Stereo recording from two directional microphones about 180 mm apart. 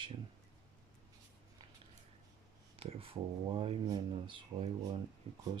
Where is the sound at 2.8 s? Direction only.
30° right (ahead or behind).